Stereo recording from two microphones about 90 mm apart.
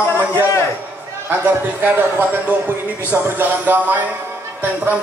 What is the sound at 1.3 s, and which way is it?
A man's voice, 20° right (ahead or behind).